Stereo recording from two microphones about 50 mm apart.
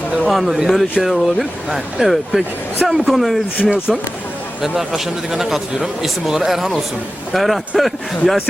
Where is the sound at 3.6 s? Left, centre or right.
Left.